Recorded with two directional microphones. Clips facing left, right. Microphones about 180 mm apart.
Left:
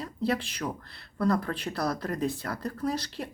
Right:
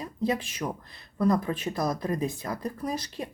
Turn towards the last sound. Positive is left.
turn(degrees=-15)  # may be behind; listen again after turning